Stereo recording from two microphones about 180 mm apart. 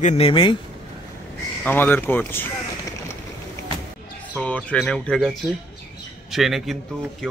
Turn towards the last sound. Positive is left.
turn(degrees=0)  # may be behind; listen again after turning